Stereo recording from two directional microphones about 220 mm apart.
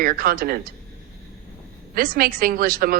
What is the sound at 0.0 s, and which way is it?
Speech, 40° right (ahead or behind).